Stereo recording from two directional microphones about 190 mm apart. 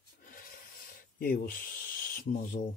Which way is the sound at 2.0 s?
45° left (ahead or behind).